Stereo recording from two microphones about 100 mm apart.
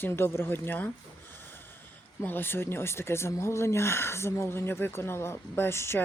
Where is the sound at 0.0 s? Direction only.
20° left (ahead or behind).